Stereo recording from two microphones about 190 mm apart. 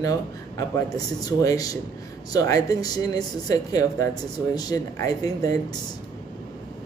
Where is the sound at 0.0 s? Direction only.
20° left (ahead or behind).